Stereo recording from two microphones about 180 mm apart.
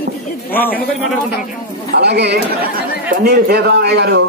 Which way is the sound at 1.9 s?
65° right (ahead or behind).